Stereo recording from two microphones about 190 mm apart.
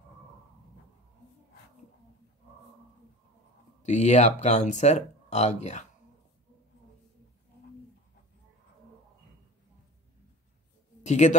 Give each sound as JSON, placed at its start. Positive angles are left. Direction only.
{"t": 3.8, "sound": "speech", "side_deg": 40}
{"t": 11.1, "sound": "speech", "side_deg": 40}